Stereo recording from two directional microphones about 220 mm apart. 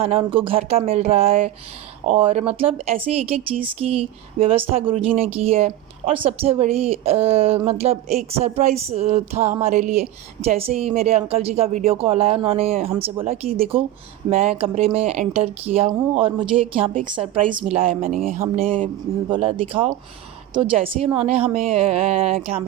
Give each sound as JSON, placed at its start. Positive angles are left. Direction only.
{"t": 0.0, "sound": "speech", "side_deg": -25}
{"t": 18.0, "sound": "speech", "side_deg": -40}
{"t": 19.3, "sound": "speech", "side_deg": -25}